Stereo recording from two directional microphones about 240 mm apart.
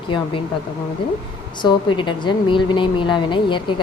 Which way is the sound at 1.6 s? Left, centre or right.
Centre.